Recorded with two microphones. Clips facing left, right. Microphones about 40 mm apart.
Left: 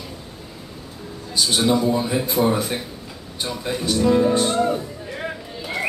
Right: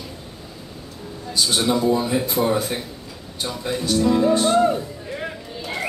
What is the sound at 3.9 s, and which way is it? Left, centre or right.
Speech, left.